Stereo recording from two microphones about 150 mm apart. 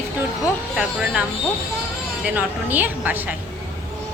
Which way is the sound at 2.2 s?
10° right (ahead or behind).